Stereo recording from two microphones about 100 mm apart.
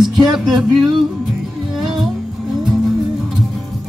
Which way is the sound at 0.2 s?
45° right (ahead or behind).